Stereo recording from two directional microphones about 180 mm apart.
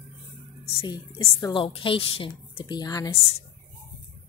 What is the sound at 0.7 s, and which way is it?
A woman's voice, 30° left (ahead or behind).